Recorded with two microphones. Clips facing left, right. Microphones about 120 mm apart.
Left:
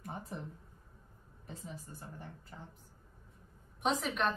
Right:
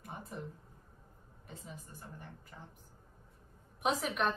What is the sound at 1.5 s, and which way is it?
Speech, 35° left (ahead or behind).